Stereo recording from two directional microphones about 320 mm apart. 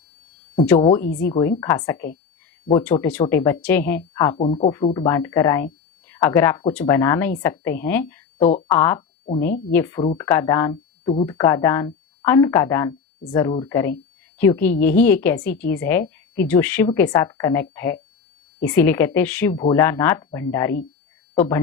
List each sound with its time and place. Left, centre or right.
0.8 s speech: centre
1.0 s speech: left
1.3 s speech: centre
4.4 s a woman's voice: centre